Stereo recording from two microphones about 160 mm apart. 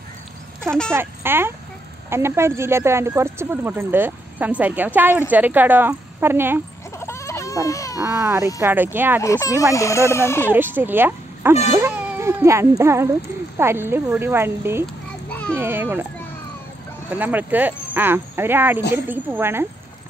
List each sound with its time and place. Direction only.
0.9 s speech: 15° right (ahead or behind)
7.0 s baby cry: 15° left (ahead or behind)
8.0 s speech: 20° right (ahead or behind)
9.2 s speech: 20° left (ahead or behind)
10.5 s speech: 10° right (ahead or behind)
17.1 s speech: 10° right (ahead or behind)